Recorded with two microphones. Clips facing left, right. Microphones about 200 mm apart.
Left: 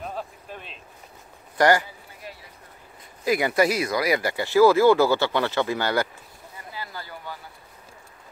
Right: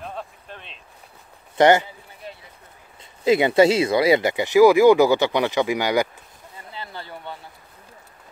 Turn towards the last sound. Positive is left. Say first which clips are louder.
# right 2 dB
turn(degrees=-25)  # may be behind; listen again after turning